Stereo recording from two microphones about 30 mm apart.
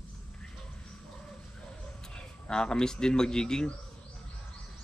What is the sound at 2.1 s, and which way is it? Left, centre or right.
Speech, left.